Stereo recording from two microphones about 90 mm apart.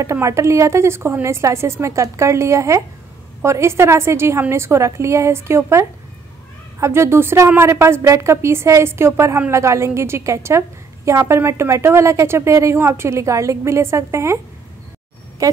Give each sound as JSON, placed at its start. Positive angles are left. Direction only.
{"t": 0.0, "sound": "a woman's voice", "side_deg": -35}